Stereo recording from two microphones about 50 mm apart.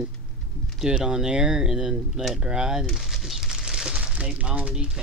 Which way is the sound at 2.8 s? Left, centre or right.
Centre.